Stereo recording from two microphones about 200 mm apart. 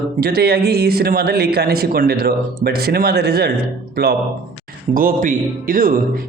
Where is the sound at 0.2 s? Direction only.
50° right (ahead or behind).